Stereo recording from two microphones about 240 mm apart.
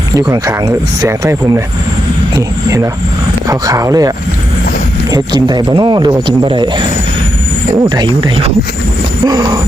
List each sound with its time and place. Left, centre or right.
0.3 s speech: centre
5.1 s speech: centre